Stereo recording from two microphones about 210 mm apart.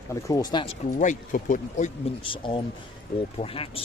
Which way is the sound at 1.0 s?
40° left (ahead or behind).